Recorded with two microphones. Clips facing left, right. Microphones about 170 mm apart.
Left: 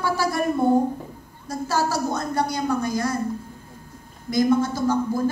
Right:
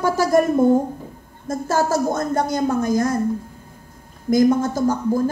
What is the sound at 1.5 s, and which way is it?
A woman's voice, 50° right (ahead or behind).